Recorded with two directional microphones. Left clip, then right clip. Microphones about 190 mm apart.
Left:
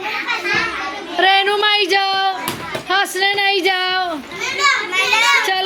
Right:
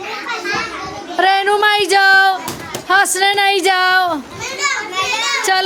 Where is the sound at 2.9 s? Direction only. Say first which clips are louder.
Right 4 dB; 15° right (ahead or behind).